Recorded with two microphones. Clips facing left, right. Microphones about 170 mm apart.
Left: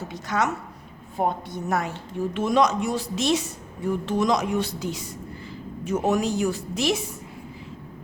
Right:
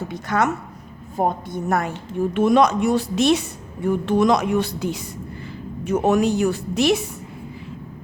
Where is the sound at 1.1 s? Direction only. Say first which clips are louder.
Right 3 dB; 45° right (ahead or behind); by 7.0 s 65° right (ahead or behind).